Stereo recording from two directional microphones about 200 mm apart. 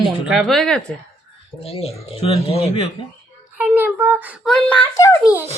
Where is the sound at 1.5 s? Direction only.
30° left (ahead or behind).